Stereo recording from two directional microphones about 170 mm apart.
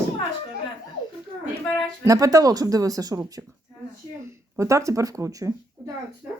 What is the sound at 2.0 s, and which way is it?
Speech, 20° right (ahead or behind).